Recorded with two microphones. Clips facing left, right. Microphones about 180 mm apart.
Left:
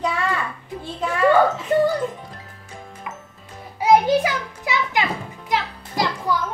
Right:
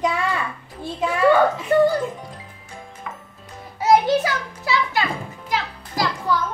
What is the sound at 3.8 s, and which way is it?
Music, 15° left (ahead or behind).